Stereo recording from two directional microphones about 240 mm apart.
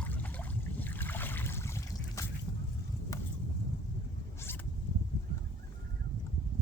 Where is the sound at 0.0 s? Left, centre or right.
Centre.